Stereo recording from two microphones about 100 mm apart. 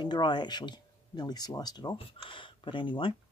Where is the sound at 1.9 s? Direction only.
60° left (ahead or behind).